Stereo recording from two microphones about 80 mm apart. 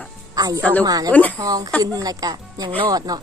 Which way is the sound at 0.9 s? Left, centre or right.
Right.